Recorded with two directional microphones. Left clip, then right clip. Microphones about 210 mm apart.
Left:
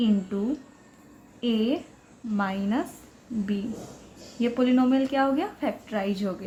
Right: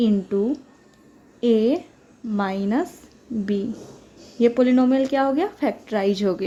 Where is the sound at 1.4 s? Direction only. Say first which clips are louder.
Right 8 dB; 40° right (ahead or behind).